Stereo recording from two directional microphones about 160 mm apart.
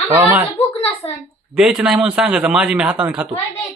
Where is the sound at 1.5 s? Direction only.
5° right (ahead or behind).